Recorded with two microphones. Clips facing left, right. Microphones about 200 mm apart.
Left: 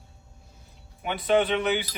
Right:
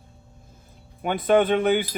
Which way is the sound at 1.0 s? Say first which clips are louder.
Right 4 dB; 50° right (ahead or behind).